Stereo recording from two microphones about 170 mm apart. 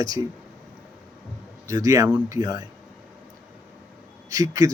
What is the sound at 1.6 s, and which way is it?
A man's voice, 20° right (ahead or behind).